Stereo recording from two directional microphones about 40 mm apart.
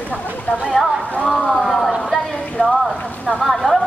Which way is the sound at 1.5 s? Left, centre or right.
Centre.